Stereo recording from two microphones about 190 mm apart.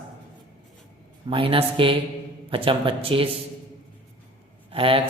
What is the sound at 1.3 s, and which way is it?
Speech, 25° right (ahead or behind).